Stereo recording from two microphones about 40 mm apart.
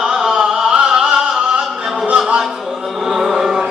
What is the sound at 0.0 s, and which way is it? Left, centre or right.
Music, centre.